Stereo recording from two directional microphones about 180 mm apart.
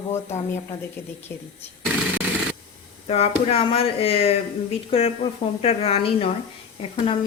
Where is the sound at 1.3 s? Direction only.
10° left (ahead or behind).